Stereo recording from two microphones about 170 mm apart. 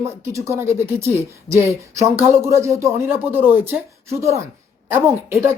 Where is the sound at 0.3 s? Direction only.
15° right (ahead or behind).